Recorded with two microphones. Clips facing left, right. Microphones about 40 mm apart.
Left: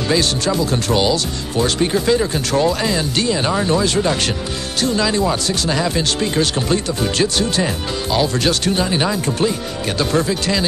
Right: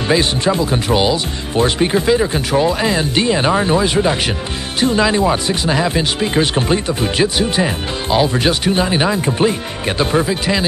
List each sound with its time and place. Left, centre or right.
0.1 s speech: right